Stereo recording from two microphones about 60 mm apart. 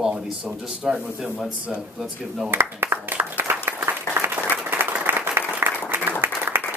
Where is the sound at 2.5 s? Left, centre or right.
Right.